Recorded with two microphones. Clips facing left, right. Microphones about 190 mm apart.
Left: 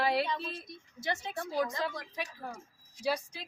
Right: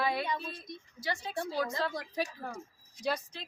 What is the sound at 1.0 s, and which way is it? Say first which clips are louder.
Speech: left 1 dB; 25° left (ahead or behind).